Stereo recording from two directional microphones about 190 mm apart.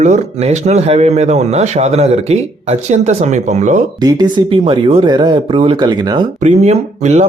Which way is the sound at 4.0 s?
20° right (ahead or behind).